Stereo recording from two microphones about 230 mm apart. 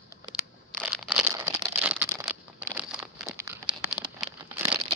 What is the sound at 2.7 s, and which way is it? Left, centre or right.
Crumpling, centre.